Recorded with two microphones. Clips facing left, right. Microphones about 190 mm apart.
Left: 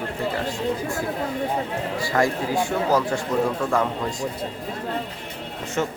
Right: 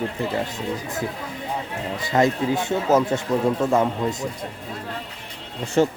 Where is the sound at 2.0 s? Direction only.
20° right (ahead or behind).